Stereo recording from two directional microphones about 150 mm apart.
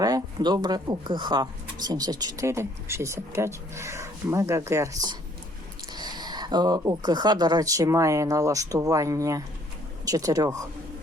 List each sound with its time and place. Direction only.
0.0 s speech: 25° right (ahead or behind)